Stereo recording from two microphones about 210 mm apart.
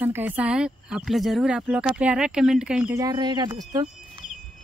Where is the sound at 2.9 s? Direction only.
20° right (ahead or behind).